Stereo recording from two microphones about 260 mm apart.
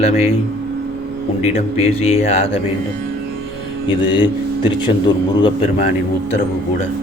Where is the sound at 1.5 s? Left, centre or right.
Left.